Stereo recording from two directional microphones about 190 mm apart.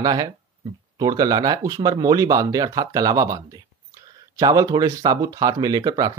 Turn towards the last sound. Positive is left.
turn(degrees=-20)  # may be behind; listen again after turning